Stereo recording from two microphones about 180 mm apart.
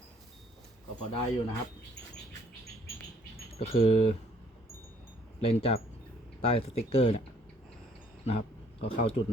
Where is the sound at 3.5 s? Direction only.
35° left (ahead or behind).